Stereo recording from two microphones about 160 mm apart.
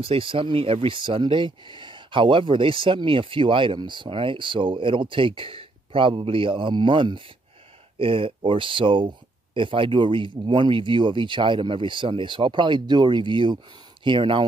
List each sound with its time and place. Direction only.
0.0 s speech: 35° right (ahead or behind)